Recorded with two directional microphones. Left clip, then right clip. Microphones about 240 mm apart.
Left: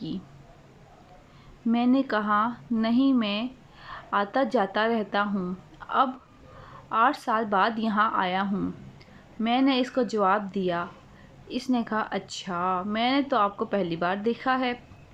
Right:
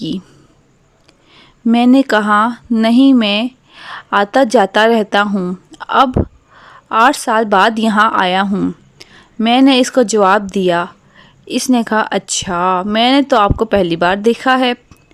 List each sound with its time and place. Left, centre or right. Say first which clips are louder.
1.4 s a woman's voice: right 13 dB; right